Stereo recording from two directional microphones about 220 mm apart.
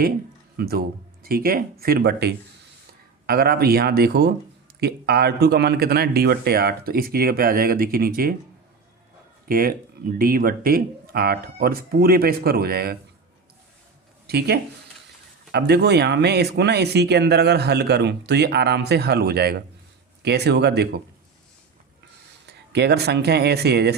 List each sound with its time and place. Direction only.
0.5 s speech: 45° right (ahead or behind)
9.5 s speech: 40° right (ahead or behind)
14.3 s speech: 45° right (ahead or behind)
22.4 s speech: 50° right (ahead or behind)